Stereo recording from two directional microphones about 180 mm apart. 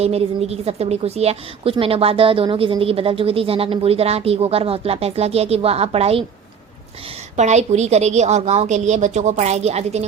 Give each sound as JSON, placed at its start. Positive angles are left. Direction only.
{"t": 0.0, "sound": "speech", "side_deg": -35}
{"t": 7.3, "sound": "speech", "side_deg": -40}